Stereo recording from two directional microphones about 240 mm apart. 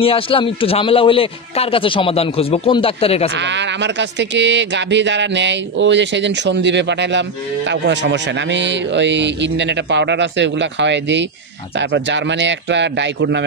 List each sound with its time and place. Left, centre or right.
0.0 s speech: left
3.3 s speech: right